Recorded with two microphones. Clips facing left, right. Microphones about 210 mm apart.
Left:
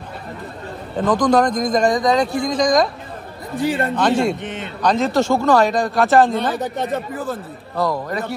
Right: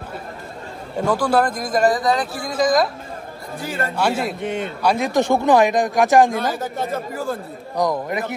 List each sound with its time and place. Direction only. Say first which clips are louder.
0.9 s speech: left 3 dB; 10° right (ahead or behind)
4.4 s a man's voice: right 4 dB; 45° right (ahead or behind)
4.8 s speech: left 2 dB; 15° right (ahead or behind)
6.3 s speech: left 2 dB; centre (ahead or behind)
7.7 s speech: even; 15° right (ahead or behind)